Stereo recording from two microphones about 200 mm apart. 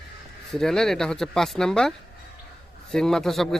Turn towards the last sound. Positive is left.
turn(degrees=0)  # may be behind; listen again after turning